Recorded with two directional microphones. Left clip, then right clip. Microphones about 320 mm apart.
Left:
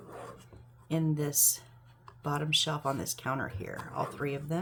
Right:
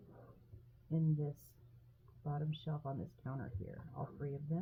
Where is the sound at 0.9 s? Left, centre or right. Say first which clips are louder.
Left 10 dB; centre.